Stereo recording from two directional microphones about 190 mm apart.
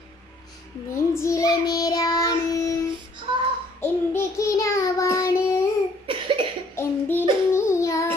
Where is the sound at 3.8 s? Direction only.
15° left (ahead or behind).